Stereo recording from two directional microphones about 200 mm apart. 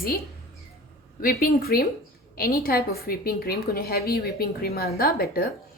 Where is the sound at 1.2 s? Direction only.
50° left (ahead or behind).